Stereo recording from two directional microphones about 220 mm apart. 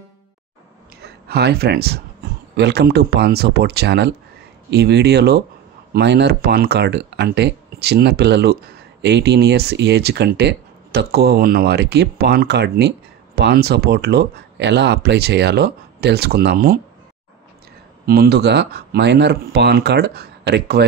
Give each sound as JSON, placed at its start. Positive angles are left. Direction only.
{"t": 1.0, "sound": "speech", "side_deg": -45}
{"t": 18.0, "sound": "speech", "side_deg": -45}